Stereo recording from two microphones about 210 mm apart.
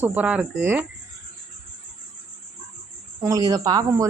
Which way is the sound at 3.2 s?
15° right (ahead or behind).